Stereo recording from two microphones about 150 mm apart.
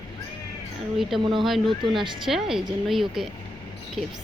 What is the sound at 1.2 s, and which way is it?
Speech, 30° right (ahead or behind).